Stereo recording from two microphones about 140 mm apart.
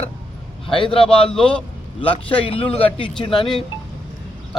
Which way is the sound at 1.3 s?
5° left (ahead or behind).